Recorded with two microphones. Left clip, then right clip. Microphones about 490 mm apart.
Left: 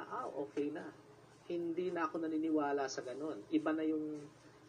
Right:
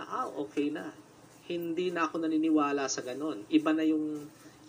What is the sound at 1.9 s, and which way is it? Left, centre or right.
A man's voice, left.